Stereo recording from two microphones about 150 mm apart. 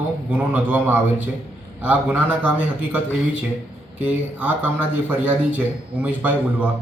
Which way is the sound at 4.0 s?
10° right (ahead or behind).